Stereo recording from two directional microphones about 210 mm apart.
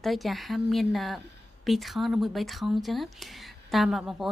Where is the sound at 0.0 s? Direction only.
Centre (ahead or behind).